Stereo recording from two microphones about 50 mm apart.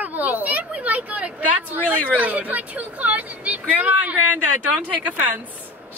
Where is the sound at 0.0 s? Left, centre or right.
Right.